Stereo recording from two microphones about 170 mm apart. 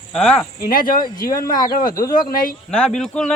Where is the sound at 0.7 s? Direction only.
55° left (ahead or behind).